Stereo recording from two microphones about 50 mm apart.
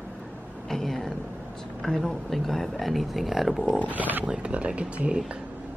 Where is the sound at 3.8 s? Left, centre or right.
Right.